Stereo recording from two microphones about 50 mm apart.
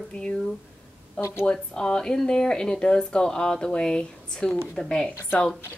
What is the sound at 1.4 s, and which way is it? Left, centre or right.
Speech, centre.